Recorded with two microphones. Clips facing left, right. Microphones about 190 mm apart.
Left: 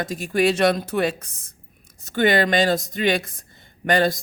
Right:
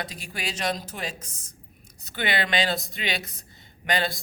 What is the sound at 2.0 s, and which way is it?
Speech, 45° left (ahead or behind).